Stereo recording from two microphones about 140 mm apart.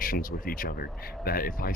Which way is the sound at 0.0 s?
90° left.